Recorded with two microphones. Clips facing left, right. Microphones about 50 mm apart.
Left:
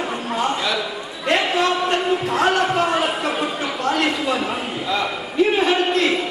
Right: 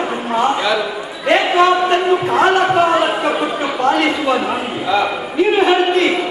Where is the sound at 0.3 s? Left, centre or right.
Centre.